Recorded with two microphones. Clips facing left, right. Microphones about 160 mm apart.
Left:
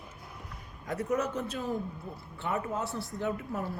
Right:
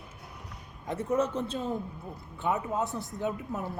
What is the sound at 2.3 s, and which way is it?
A man's voice, 15° right (ahead or behind).